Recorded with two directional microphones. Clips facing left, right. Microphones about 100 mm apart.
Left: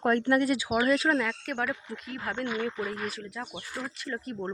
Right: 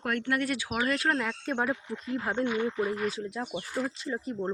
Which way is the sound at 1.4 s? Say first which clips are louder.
Right 2 dB; 25° right (ahead or behind).